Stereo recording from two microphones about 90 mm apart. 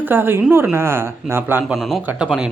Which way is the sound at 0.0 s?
25° right (ahead or behind).